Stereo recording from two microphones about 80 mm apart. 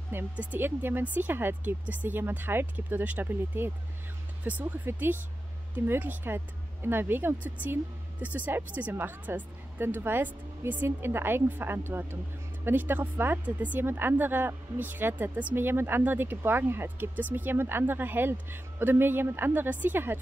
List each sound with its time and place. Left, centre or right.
0.1 s speech: right